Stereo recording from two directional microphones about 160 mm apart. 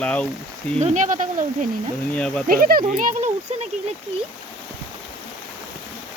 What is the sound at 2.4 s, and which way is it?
Speech, 65° right (ahead or behind).